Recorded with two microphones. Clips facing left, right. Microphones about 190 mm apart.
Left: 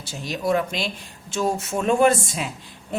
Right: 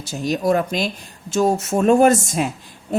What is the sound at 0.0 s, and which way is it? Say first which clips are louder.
A woman's voice: right 6 dB; 45° right (ahead or behind).